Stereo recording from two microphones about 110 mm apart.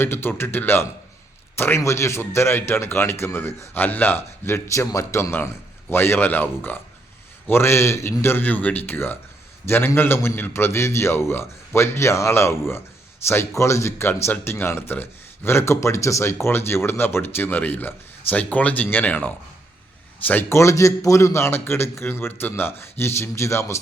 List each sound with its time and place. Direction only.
0.0 s speech: 20° left (ahead or behind)